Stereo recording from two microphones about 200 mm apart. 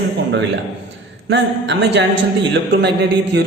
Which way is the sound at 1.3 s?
60° right (ahead or behind).